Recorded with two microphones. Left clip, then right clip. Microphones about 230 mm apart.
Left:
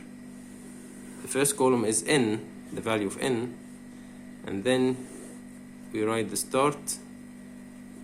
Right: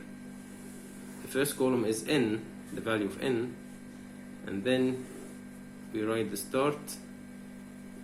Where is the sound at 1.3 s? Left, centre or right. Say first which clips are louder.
Left 5 dB; left.